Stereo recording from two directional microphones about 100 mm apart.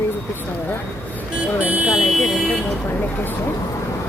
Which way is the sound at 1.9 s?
5° right (ahead or behind).